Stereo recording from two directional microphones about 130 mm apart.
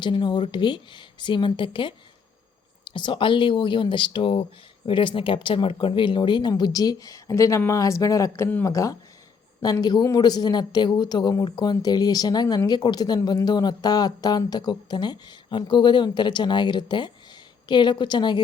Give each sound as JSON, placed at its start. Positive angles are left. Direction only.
{"t": 0.0, "sound": "speech", "side_deg": 35}